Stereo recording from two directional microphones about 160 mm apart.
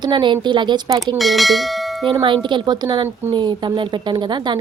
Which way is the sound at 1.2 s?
Centre (ahead or behind).